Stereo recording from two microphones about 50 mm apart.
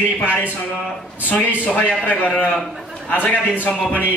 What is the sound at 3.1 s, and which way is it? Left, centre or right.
Speech, left.